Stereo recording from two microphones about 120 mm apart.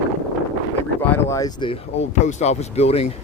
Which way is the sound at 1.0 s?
20° left (ahead or behind).